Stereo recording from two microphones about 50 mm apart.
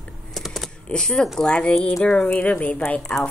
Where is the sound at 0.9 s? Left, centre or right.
Centre.